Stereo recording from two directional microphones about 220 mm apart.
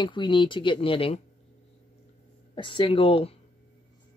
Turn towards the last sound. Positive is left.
turn(degrees=25)  # may be behind; listen again after turning